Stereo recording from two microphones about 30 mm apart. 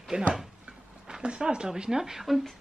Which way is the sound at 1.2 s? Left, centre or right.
Right.